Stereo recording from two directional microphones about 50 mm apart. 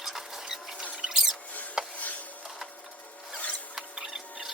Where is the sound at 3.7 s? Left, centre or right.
Centre.